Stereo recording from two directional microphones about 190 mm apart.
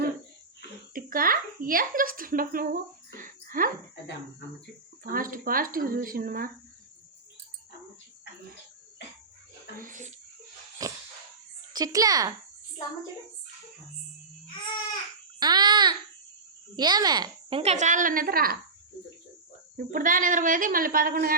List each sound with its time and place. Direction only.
0.9 s speech: 50° right (ahead or behind)
4.0 s speech: 65° left (ahead or behind)
5.0 s a woman's voice: 50° right (ahead or behind)
9.7 s a woman's voice: 45° right (ahead or behind)
10.8 s a sound: 20° right (ahead or behind)
11.7 s speech: 20° right (ahead or behind)
15.4 s a sound: 20° right (ahead or behind)
16.7 s speech: 20° right (ahead or behind); by 18.5 s 50° right (ahead or behind)
19.7 s a woman's voice: 45° right (ahead or behind)